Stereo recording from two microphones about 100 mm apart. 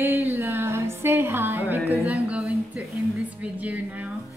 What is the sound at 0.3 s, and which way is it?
Music, 25° right (ahead or behind).